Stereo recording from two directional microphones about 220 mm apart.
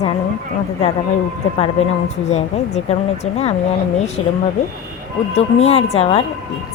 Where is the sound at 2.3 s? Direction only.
30° left (ahead or behind).